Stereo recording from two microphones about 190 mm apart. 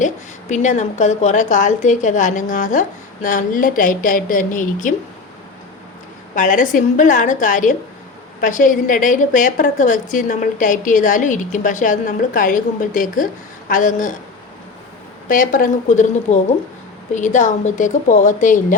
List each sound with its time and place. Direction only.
0.5 s a woman's voice: 40° left (ahead or behind)
6.3 s a woman's voice: 45° left (ahead or behind)
15.3 s a woman's voice: 45° left (ahead or behind)